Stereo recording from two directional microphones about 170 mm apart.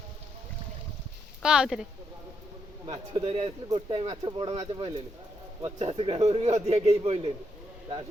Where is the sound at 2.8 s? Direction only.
30° right (ahead or behind).